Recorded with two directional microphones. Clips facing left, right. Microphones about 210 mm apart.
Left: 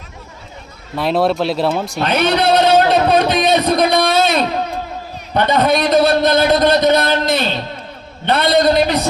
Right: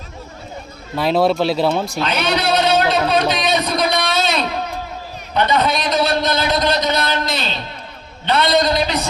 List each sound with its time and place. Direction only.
0.9 s speech: centre (ahead or behind)
2.0 s a sound: 55° left (ahead or behind)
5.3 s a man's voice: 55° left (ahead or behind)